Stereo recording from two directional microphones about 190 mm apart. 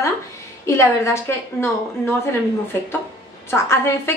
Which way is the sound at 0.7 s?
15° left (ahead or behind).